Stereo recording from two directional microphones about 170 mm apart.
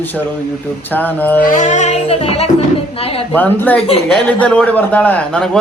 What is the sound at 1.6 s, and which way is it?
Speech, 45° left (ahead or behind).